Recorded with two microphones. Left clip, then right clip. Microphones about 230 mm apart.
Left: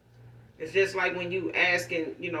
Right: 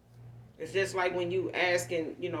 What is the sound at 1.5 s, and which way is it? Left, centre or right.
Speech, right.